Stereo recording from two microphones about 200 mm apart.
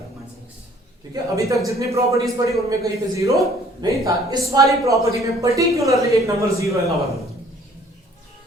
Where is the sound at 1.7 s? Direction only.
15° right (ahead or behind).